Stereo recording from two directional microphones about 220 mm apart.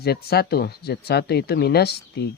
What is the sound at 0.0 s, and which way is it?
Speech, 45° left (ahead or behind).